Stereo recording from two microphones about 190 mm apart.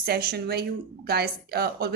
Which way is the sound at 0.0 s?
55° right (ahead or behind).